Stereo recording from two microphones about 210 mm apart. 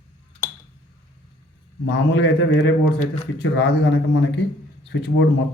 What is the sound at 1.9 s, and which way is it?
Speech, 55° left (ahead or behind).